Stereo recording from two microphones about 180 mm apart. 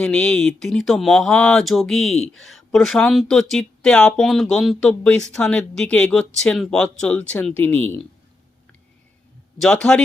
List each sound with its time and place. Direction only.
0.0 s speech: 5° left (ahead or behind)
9.6 s speech: 5° left (ahead or behind)